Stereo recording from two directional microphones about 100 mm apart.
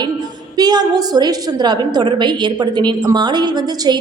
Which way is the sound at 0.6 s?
40° right (ahead or behind).